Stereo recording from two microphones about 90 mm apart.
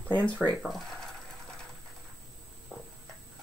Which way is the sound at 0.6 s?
Centre (ahead or behind).